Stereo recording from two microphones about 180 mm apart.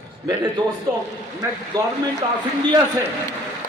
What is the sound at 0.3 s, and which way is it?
Speech, 20° right (ahead or behind).